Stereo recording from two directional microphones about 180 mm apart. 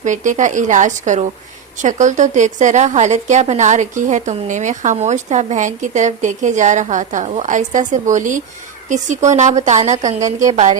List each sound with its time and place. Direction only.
0.0 s a woman's voice: 45° right (ahead or behind)
10.2 s a woman's voice: 20° right (ahead or behind)
10.5 s speech: 40° right (ahead or behind)